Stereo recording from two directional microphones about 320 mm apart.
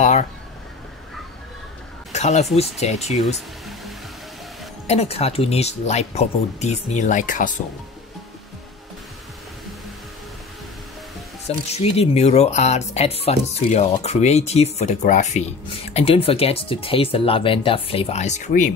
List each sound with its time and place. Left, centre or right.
0.0 s a sound: left
2.1 s speech: left
4.8 s speech: centre
11.4 s speech: centre